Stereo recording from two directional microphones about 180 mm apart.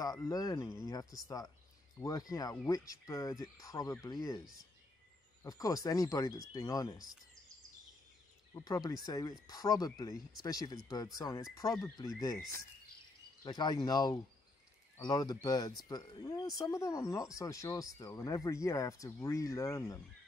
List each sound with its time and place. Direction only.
0.0 s speech: 20° left (ahead or behind)
5.4 s speech: 20° left (ahead or behind)
8.5 s speech: 20° left (ahead or behind)